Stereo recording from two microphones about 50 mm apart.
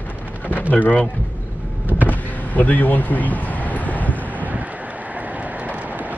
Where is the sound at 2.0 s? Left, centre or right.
Left.